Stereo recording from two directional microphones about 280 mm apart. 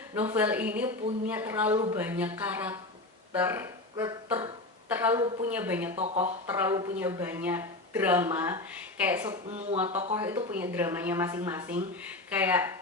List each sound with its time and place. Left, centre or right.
0.1 s a woman's voice: centre
1.7 s speech: centre
2.0 s a woman's voice: centre
6.0 s speech: right
6.5 s a woman's voice: centre
9.5 s speech: right
9.7 s a woman's voice: centre